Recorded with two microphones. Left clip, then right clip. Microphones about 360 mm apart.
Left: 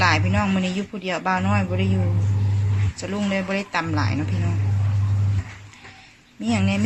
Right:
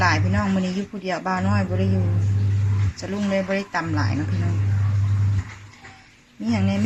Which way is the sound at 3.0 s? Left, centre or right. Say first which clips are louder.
Right 1 dB; centre.